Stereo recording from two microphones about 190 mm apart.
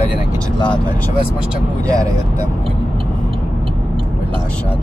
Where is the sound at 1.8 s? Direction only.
20° right (ahead or behind).